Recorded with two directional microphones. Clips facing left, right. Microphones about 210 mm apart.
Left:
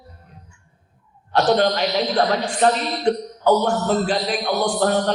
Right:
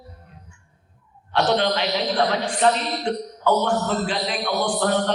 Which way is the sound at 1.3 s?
45° left (ahead or behind).